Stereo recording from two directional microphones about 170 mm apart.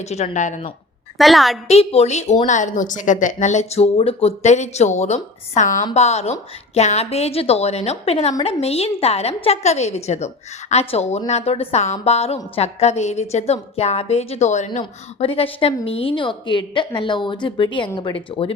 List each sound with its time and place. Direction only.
0.0 s a woman's voice: 40° left (ahead or behind)
1.2 s a woman's voice: centre (ahead or behind)
1.6 s a woman's voice: 35° left (ahead or behind)